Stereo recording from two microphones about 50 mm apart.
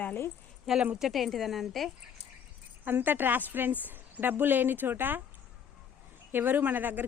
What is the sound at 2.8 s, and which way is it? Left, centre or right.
A woman's voice, right.